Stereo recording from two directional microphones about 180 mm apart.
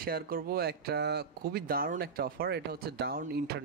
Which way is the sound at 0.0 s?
55° right (ahead or behind).